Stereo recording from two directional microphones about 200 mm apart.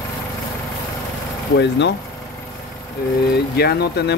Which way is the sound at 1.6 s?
60° left (ahead or behind).